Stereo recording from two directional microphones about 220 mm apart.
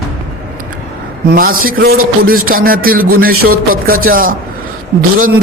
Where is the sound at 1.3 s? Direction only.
40° right (ahead or behind).